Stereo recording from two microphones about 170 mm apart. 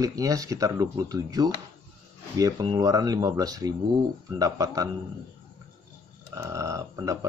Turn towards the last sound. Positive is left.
turn(degrees=-20)  # may be behind; listen again after turning